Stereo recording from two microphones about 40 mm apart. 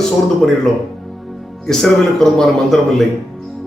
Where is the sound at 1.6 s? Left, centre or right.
Centre.